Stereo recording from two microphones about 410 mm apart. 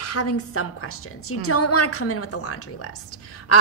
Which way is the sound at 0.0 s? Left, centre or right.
Left.